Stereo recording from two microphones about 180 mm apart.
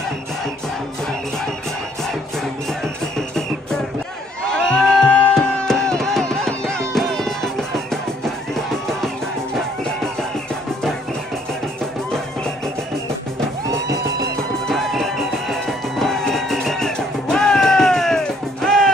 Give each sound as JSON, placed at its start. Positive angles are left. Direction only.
{"t": 2.8, "sound": "music", "side_deg": 5}
{"t": 13.7, "sound": "music", "side_deg": -15}
{"t": 14.7, "sound": "music", "side_deg": 0}